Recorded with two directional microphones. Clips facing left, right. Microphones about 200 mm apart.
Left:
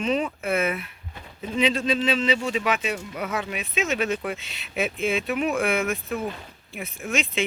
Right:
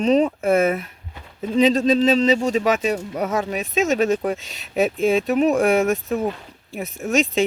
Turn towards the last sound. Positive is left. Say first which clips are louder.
# right 7 dB
turn(degrees=-40)  # may be behind; listen again after turning